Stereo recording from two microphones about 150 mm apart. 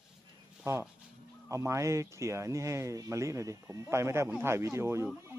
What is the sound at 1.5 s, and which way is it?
Speech, 20° right (ahead or behind).